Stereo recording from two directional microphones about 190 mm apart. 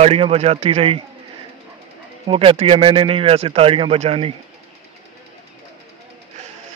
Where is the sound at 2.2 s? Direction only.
30° right (ahead or behind).